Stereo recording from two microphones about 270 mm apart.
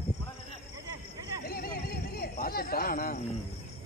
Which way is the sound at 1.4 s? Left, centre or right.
Left.